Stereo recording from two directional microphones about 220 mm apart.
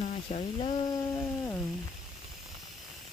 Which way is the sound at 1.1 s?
10° left (ahead or behind).